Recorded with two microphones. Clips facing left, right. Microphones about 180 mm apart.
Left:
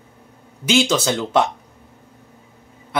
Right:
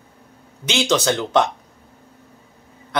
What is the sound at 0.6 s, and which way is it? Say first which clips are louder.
Speech: left 2 dB; 5° left (ahead or behind).